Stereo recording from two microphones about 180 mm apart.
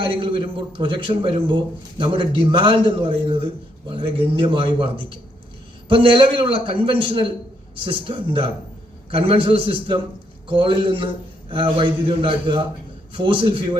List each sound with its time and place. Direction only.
0.0 s a man's voice: 30° right (ahead or behind)